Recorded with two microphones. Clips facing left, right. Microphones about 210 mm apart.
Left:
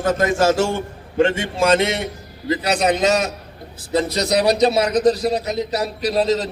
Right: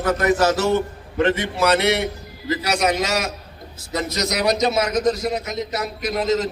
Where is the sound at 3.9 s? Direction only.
30° left (ahead or behind).